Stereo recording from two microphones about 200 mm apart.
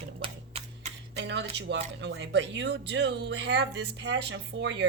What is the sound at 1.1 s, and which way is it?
Speech, 60° right (ahead or behind).